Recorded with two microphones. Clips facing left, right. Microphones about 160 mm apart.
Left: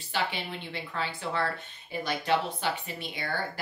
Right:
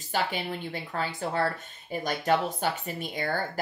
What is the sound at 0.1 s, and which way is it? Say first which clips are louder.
Speech: right 3 dB; 45° right (ahead or behind).